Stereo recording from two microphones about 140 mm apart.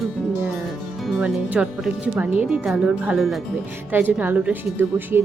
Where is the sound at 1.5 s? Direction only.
5° right (ahead or behind).